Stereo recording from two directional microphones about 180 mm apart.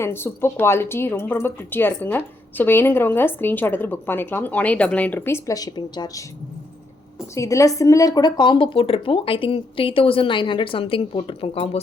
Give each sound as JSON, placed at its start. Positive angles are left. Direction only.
{"t": 0.0, "sound": "a woman's voice", "side_deg": 15}
{"t": 7.3, "sound": "speech", "side_deg": 15}